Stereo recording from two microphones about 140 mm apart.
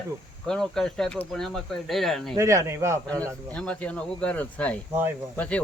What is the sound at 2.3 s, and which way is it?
Speech, 20° right (ahead or behind).